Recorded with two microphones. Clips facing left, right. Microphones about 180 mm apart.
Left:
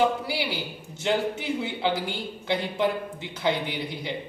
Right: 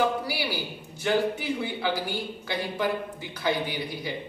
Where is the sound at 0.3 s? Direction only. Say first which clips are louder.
Left 1 dB; 20° left (ahead or behind).